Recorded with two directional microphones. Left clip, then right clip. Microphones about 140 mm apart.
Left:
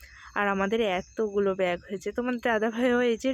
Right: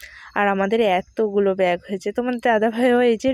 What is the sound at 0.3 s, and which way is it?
Speech, 35° right (ahead or behind).